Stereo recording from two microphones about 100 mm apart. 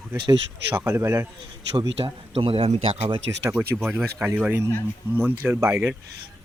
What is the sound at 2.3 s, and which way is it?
Speech, 70° right (ahead or behind).